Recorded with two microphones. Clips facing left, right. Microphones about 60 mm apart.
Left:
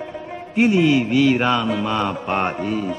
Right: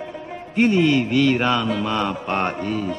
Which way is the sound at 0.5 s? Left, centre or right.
Centre.